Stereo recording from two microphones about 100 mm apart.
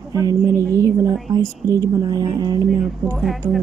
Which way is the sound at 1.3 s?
35° right (ahead or behind).